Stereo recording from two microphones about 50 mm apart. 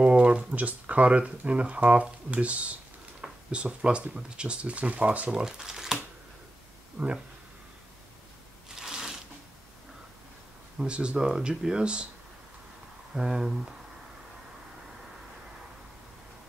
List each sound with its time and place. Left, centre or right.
0.0 s speech: right
5.3 s speech: centre
7.0 s speech: centre
8.7 s a sound: centre
10.8 s speech: right
11.2 s speech: centre
13.1 s speech: centre